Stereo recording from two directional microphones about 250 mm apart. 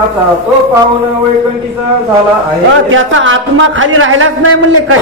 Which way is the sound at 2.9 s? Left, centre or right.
Right.